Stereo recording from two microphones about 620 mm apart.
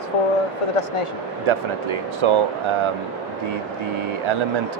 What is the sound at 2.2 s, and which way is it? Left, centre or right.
Speech, right.